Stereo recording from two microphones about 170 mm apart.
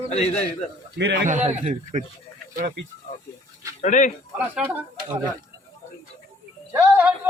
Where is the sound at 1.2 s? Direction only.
45° right (ahead or behind).